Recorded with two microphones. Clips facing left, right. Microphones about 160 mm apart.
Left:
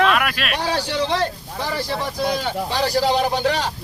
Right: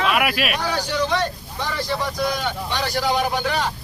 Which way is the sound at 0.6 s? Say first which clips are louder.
Left 1 dB; 30° left (ahead or behind).